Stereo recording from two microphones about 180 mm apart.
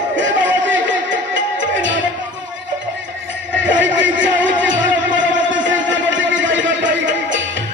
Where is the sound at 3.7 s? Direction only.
90° right.